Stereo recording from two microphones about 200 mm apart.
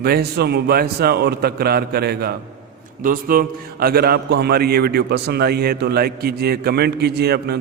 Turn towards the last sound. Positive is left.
turn(degrees=-55)  # may be behind; listen again after turning